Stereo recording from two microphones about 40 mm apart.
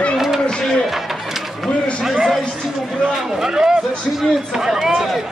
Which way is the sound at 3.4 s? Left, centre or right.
Centre.